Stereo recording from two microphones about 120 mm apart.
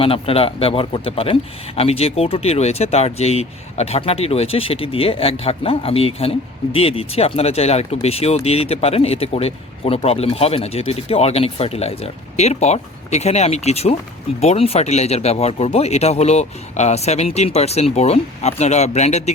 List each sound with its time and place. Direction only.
0.0 s a man's voice: 50° left (ahead or behind); by 19.3 s 65° left (ahead or behind)